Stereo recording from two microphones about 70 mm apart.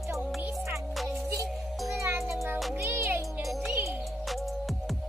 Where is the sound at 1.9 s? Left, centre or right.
Right.